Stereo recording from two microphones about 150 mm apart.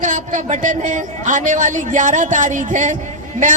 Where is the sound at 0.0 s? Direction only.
60° right (ahead or behind).